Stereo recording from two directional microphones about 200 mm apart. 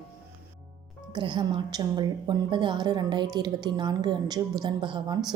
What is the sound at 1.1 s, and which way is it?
A woman's voice, 25° right (ahead or behind).